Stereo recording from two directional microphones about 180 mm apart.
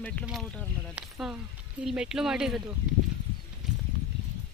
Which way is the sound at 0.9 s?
5° right (ahead or behind).